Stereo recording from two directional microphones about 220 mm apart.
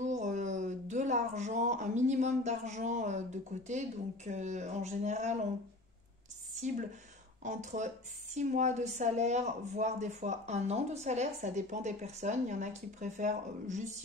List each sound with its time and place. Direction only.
0.0 s speech: 35° right (ahead or behind)
7.4 s speech: 35° right (ahead or behind)